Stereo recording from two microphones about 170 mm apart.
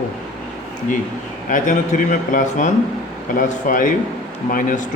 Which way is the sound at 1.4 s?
50° left (ahead or behind).